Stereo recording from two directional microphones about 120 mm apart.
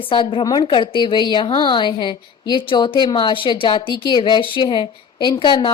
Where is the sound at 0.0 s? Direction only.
45° left (ahead or behind).